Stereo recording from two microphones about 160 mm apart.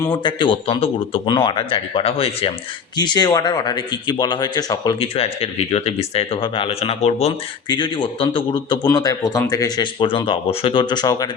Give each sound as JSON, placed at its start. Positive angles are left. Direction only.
{"t": 0.1, "sound": "speech", "side_deg": 30}
{"t": 5.1, "sound": "speech", "side_deg": 40}
{"t": 7.7, "sound": "speech", "side_deg": 30}